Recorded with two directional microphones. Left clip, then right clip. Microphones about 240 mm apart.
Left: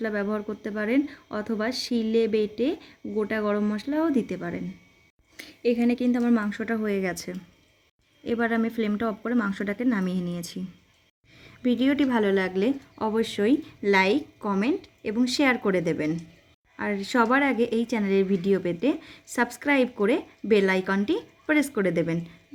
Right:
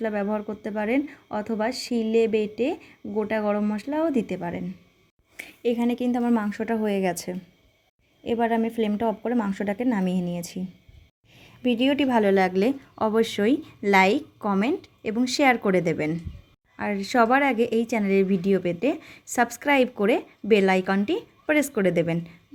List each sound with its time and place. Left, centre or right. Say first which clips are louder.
0.0 s speech: right 2 dB; centre
11.8 s a woman's voice: right 3 dB; centre